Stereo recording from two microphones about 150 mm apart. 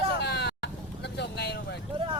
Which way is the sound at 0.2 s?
90° left.